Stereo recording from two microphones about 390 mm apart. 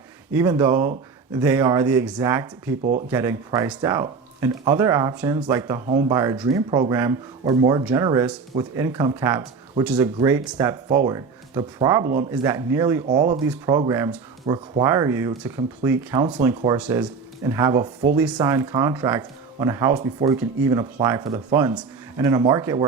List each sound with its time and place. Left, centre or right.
0.3 s speech: centre
13.1 s speech: centre
13.4 s speech: centre